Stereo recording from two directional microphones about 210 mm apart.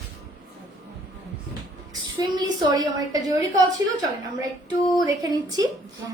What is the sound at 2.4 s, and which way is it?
A woman's voice, 15° right (ahead or behind).